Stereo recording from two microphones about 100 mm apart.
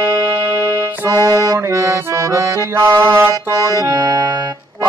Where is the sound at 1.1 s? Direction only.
30° right (ahead or behind).